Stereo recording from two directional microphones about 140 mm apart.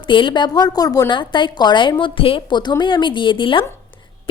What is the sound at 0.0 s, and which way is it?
A woman's voice, 35° left (ahead or behind).